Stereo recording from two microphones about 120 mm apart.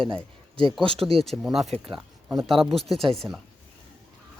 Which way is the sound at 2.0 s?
20° right (ahead or behind).